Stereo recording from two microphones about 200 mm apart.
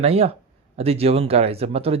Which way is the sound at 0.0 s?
30° right (ahead or behind).